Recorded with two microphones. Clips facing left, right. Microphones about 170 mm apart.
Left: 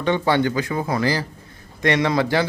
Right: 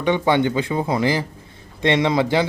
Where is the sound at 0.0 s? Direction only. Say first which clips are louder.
Right 1 dB; 15° right (ahead or behind).